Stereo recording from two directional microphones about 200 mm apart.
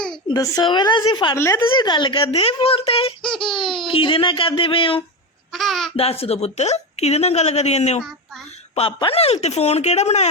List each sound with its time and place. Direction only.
0.3 s speech: 15° left (ahead or behind)
1.4 s speech: 10° left (ahead or behind)
1.7 s speech: 20° left (ahead or behind)
5.5 s a child's voice: centre (ahead or behind)
6.0 s a woman's voice: 30° left (ahead or behind)